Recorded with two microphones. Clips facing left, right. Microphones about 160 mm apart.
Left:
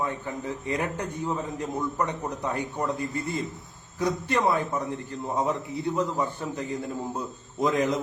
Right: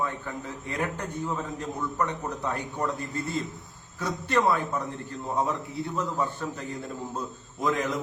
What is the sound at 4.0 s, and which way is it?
Speech, 15° left (ahead or behind).